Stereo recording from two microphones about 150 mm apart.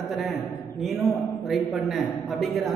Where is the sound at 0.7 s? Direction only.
Centre (ahead or behind).